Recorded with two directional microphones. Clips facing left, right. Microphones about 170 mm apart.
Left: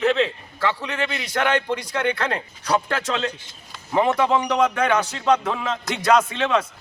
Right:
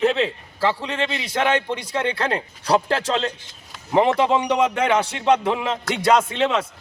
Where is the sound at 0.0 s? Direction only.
30° right (ahead or behind).